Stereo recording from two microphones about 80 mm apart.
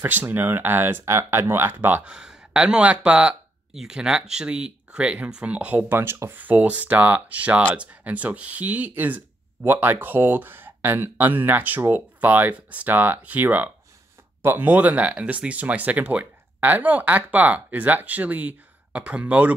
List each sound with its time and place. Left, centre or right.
0.0 s speech: right
2.0 s speech: centre; by 6.3 s right
6.3 s speech: right